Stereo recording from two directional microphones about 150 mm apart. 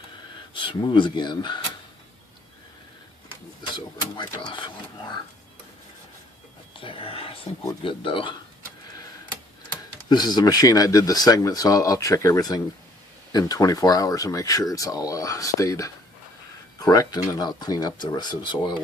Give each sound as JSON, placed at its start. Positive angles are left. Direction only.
{"t": 0.5, "sound": "speech", "side_deg": 35}
{"t": 3.8, "sound": "speech", "side_deg": 30}
{"t": 6.7, "sound": "speech", "side_deg": 35}
{"t": 10.1, "sound": "speech", "side_deg": 25}